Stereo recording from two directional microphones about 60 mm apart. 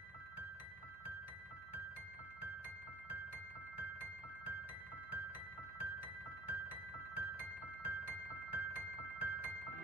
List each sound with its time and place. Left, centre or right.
3.7 s music: right
5.8 s music: right